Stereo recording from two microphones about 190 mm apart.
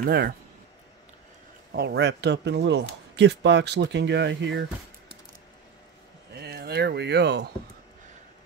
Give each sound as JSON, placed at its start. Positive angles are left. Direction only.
{"t": 0.0, "sound": "speech", "side_deg": -55}
{"t": 1.7, "sound": "speech", "side_deg": -60}
{"t": 6.3, "sound": "speech", "side_deg": -55}